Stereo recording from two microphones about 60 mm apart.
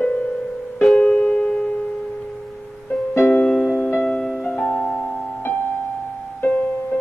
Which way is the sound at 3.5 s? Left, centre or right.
Centre.